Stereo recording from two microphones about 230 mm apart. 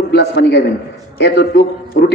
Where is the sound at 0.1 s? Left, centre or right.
Left.